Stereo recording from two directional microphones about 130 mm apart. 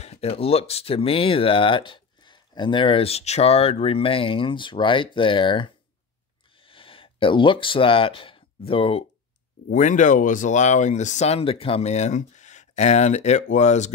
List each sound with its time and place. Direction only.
0.0 s speech: 50° left (ahead or behind)
6.5 s a sound: 45° left (ahead or behind)
9.7 s speech: 75° left (ahead or behind)